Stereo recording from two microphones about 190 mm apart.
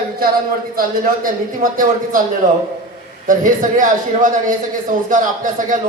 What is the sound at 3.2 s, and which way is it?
A man's voice, 45° right (ahead or behind).